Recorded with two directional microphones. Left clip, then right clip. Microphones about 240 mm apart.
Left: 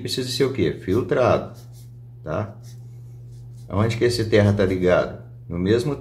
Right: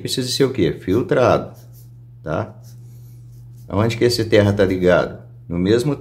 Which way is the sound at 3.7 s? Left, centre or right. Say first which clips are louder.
Right 4 dB; right.